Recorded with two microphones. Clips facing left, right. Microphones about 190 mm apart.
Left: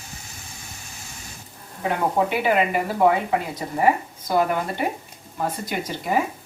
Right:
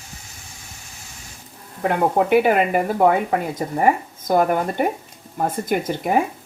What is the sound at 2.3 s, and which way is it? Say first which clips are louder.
Speech: right 5 dB; 50° right (ahead or behind).